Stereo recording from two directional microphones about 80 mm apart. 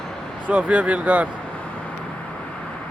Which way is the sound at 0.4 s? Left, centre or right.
Centre.